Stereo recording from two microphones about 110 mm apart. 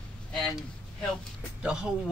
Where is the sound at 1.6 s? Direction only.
5° right (ahead or behind).